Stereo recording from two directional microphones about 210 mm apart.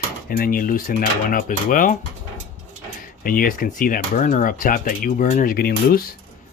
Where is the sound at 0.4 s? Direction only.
40° left (ahead or behind).